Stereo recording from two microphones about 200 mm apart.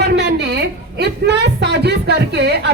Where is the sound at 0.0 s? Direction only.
55° right (ahead or behind).